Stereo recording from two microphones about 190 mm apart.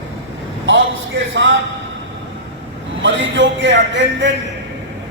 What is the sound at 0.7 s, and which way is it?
Speech, 75° right (ahead or behind).